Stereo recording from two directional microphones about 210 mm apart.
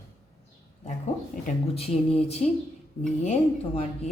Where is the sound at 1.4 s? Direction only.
30° left (ahead or behind).